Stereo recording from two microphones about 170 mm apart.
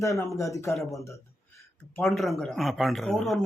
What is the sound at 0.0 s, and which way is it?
Speech, 20° left (ahead or behind).